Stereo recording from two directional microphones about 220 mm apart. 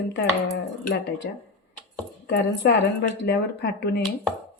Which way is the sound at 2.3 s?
50° left (ahead or behind).